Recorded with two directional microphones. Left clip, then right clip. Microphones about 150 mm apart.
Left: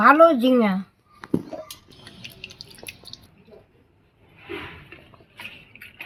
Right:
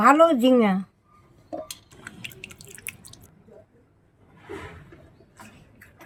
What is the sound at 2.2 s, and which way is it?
Drip, 75° right (ahead or behind).